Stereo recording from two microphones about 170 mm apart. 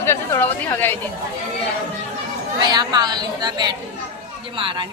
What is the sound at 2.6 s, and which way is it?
A woman's voice, 25° right (ahead or behind).